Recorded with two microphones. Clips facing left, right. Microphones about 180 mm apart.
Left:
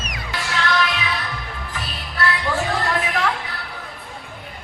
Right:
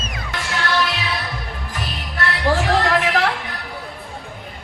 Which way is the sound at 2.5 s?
80° right.